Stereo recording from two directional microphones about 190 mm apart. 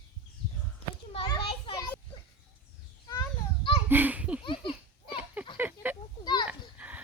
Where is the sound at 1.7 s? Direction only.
20° left (ahead or behind).